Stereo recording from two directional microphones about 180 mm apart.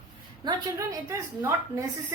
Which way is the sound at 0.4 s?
20° right (ahead or behind).